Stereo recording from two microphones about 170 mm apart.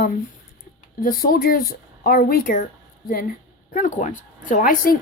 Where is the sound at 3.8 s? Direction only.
45° left (ahead or behind).